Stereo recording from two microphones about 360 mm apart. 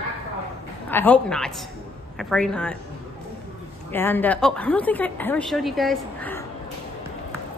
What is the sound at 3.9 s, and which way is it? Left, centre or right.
A woman's voice, centre.